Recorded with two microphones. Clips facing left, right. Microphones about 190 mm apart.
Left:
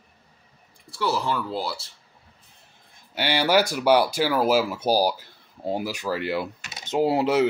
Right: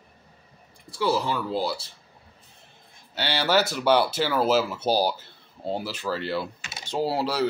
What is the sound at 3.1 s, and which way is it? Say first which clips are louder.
Speech: left 2 dB; 15° left (ahead or behind).